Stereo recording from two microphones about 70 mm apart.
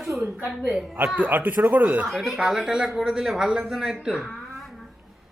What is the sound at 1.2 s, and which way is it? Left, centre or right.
Speech, right.